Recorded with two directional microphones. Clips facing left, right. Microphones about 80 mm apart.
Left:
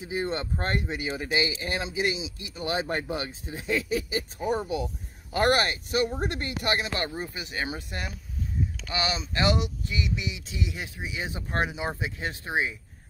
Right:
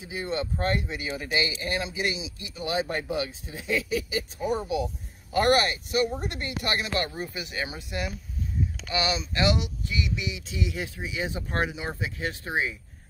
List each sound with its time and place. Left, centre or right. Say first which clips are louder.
0.1 s speech: left 1 dB; left